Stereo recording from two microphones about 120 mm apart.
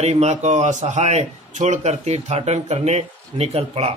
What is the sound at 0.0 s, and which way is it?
A man's voice, 65° right (ahead or behind).